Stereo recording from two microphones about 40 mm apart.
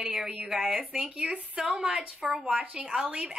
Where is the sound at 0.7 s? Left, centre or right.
Right.